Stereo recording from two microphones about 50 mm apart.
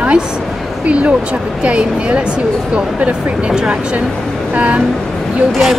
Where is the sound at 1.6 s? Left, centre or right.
Right.